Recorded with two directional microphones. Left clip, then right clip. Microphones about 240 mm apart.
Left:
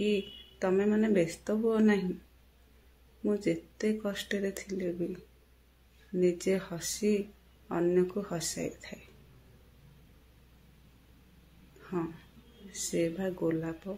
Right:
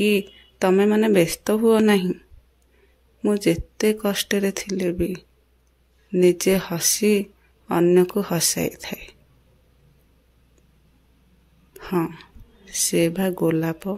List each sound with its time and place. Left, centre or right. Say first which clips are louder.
0.0 s speech: right 10 dB; right
3.3 s speech: right 10 dB; right
11.8 s a sound: right 12 dB; right
12.7 s speech: right 11 dB; right